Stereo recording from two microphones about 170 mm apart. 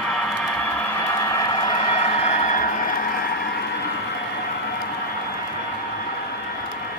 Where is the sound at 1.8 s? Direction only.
40° left (ahead or behind).